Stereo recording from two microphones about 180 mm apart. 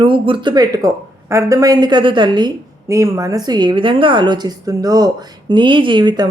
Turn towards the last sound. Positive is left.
turn(degrees=-25)  # may be behind; listen again after turning